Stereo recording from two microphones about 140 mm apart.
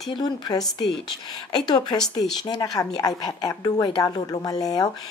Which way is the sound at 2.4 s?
25° left (ahead or behind).